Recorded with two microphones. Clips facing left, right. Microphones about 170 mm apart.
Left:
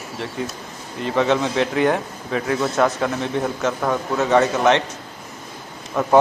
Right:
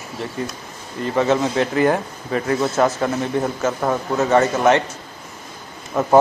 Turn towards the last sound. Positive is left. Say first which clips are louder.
# right 1 dB
turn(degrees=0)  # may be behind; listen again after turning